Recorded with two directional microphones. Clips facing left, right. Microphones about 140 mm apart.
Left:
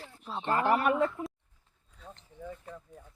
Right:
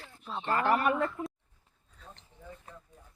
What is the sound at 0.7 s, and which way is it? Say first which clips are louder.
Speech: left 2 dB; 5° left (ahead or behind).